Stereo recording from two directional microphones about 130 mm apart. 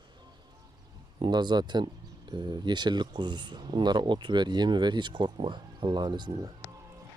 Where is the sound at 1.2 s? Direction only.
35° right (ahead or behind).